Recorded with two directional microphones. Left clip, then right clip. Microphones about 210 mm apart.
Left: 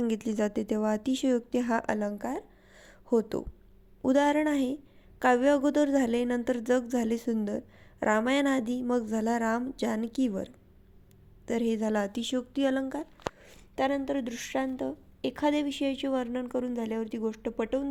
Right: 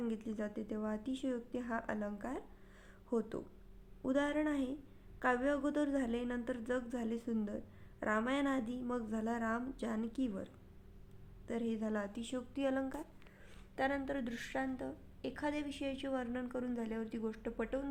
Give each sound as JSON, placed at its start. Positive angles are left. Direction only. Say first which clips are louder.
{"t": 0.1, "sound": "a woman's voice", "louder": "left 12 dB", "side_deg": 40}